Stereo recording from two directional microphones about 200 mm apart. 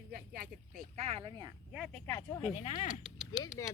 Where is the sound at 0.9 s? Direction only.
30° right (ahead or behind).